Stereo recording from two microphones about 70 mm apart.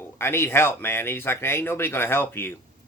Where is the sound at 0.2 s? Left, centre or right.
Left.